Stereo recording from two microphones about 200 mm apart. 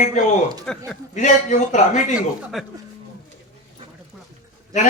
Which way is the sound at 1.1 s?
35° left (ahead or behind).